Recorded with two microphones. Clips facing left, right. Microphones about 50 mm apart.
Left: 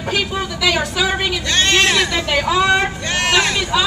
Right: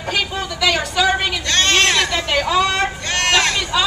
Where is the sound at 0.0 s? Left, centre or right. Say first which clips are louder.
Left 1 dB; centre.